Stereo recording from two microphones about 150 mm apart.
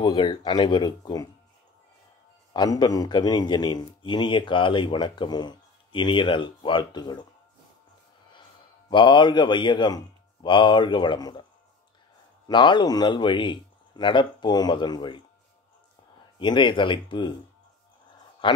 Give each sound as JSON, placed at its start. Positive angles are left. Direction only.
{"t": 0.0, "sound": "a man's voice", "side_deg": 30}
{"t": 2.5, "sound": "a man's voice", "side_deg": 30}
{"t": 8.9, "sound": "a man's voice", "side_deg": 30}
{"t": 12.4, "sound": "a man's voice", "side_deg": 30}
{"t": 16.3, "sound": "a man's voice", "side_deg": 35}
{"t": 18.4, "sound": "speech", "side_deg": 35}